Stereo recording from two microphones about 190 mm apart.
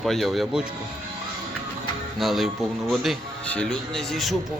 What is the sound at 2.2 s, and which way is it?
Speech, centre (ahead or behind).